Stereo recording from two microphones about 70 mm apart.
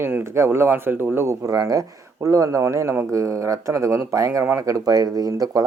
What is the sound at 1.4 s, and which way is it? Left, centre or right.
Speech, right.